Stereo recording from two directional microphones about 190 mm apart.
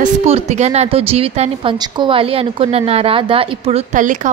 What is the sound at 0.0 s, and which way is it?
A woman's voice, 35° right (ahead or behind).